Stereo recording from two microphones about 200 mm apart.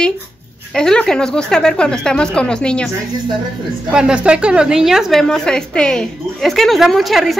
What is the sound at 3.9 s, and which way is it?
A woman's voice, 5° right (ahead or behind).